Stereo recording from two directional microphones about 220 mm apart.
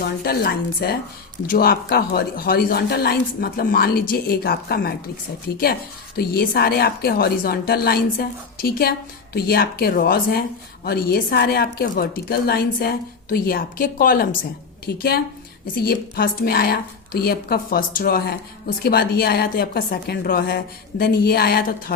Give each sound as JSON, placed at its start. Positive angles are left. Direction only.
{"t": 0.0, "sound": "a woman's voice", "side_deg": 45}
{"t": 6.1, "sound": "a woman's voice", "side_deg": 45}